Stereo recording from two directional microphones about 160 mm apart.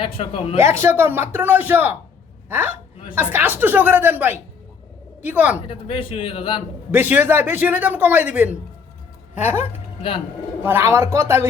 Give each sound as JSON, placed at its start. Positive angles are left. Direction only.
{"t": 0.0, "sound": "a man's voice", "side_deg": 35}
{"t": 0.6, "sound": "a man's voice", "side_deg": -15}
{"t": 5.6, "sound": "a man's voice", "side_deg": 35}
{"t": 6.9, "sound": "a man's voice", "side_deg": -10}